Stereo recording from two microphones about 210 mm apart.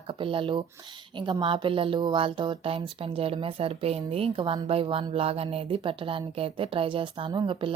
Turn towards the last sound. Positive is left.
turn(degrees=-25)  # may be behind; listen again after turning